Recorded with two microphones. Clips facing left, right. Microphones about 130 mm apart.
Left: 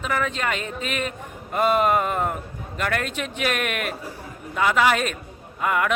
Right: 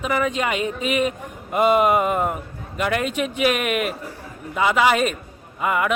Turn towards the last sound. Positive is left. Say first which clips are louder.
# right 1 dB
turn(degrees=-5)  # may be behind; listen again after turning